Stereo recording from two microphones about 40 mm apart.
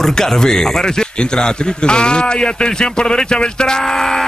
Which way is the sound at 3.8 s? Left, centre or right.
Centre.